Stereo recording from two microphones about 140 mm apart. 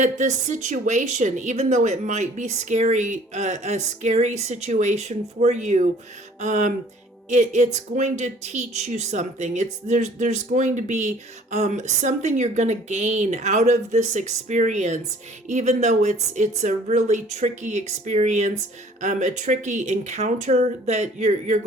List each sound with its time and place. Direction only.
0.0 s speech: 60° right (ahead or behind)